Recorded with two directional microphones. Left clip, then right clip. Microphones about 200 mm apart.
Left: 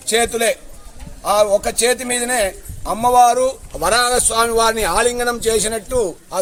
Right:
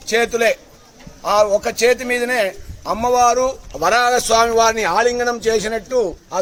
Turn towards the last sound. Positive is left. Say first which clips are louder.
# right 1 dB
turn(degrees=0)  # may be behind; listen again after turning